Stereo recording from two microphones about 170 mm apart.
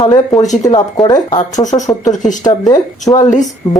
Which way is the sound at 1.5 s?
45° left (ahead or behind).